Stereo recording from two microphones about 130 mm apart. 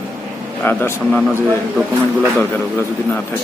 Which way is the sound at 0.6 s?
15° left (ahead or behind).